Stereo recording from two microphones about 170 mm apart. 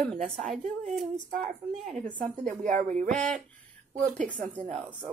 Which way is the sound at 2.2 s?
45° right (ahead or behind).